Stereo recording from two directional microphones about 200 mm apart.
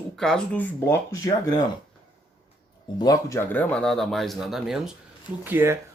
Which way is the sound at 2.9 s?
20° left (ahead or behind).